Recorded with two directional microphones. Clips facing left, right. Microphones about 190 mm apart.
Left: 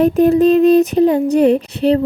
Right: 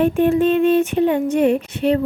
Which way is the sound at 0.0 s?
40° left (ahead or behind).